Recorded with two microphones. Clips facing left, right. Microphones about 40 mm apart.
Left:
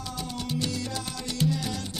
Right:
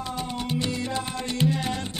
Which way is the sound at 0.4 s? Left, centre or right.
Right.